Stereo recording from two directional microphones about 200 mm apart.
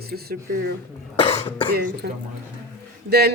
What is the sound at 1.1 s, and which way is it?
Cough, 30° left (ahead or behind).